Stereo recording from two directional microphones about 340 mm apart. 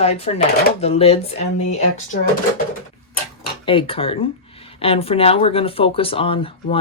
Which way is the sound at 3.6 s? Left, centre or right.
Centre.